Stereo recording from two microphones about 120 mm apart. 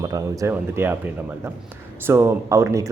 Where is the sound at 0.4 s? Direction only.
20° right (ahead or behind).